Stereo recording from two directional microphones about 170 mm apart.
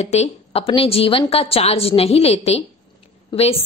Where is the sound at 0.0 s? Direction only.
40° left (ahead or behind).